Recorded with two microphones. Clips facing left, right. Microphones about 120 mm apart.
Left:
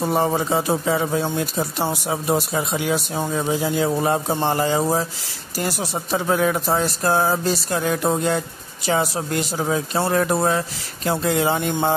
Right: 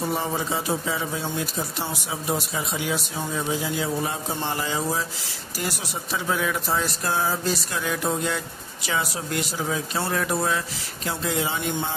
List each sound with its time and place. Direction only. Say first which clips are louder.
0.1 s speech: left 7 dB; 50° left (ahead or behind)
11.1 s speech: left 7 dB; 55° left (ahead or behind)